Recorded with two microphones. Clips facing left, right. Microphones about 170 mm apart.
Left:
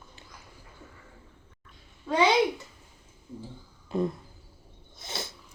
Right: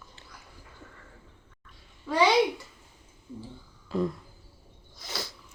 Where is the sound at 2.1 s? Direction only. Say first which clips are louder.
Even; 20° left (ahead or behind).